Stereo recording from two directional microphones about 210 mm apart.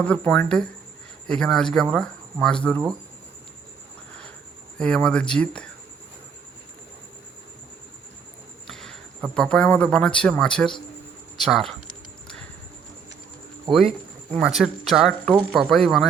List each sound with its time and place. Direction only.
0.0 s speech: 5° left (ahead or behind)
4.8 s speech: 5° left (ahead or behind)
8.6 s a man's voice: centre (ahead or behind)
13.7 s speech: 20° right (ahead or behind)
14.3 s speech: centre (ahead or behind)